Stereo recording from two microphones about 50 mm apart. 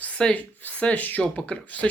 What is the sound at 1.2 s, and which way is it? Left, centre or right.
Speech, left.